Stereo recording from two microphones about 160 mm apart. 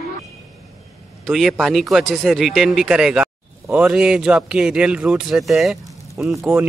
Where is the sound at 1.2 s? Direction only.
Centre (ahead or behind).